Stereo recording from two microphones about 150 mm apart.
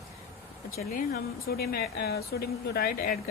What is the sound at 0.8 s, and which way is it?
Speech, 85° left.